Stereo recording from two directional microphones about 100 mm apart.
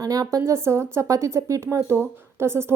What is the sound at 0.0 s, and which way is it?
A woman's voice, 35° right (ahead or behind).